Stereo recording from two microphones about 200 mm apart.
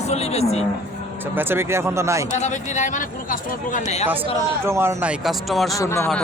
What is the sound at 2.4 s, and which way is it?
Speech, 35° left (ahead or behind).